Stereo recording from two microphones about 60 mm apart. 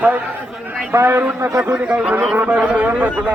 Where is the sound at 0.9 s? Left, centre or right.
Right.